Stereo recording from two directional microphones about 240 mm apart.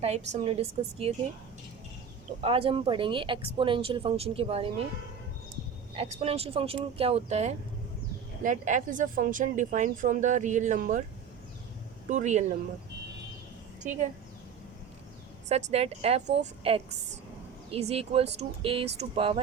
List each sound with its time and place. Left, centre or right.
0.0 s speech: right
2.4 s speech: right
6.1 s speech: right
12.0 s speech: right
15.4 s speech: right